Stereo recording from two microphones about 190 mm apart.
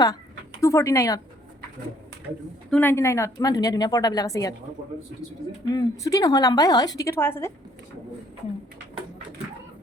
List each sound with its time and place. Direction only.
0.6 s speech: 15° left (ahead or behind)
2.6 s a woman's voice: 10° left (ahead or behind)
5.7 s a woman's voice: 15° left (ahead or behind)